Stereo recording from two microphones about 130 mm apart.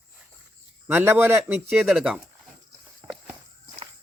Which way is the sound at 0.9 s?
15° right (ahead or behind).